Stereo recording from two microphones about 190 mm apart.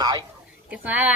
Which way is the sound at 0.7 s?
10° right (ahead or behind).